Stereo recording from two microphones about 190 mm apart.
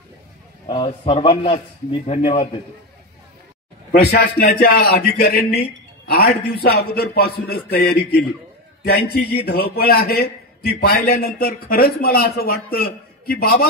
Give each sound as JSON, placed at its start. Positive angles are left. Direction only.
{"t": 0.7, "sound": "a man's voice", "side_deg": 25}
{"t": 4.0, "sound": "a man's voice", "side_deg": 50}